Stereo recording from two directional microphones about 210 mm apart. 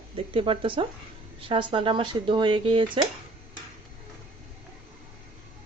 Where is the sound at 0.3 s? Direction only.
25° right (ahead or behind).